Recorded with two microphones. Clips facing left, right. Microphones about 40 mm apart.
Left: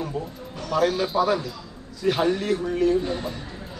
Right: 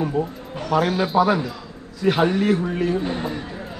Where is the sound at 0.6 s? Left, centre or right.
Right.